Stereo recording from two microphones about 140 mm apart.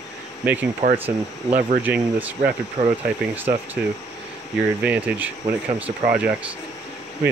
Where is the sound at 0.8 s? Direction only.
50° right (ahead or behind).